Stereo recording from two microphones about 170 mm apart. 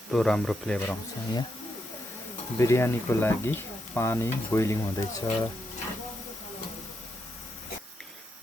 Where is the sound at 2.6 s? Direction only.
15° left (ahead or behind).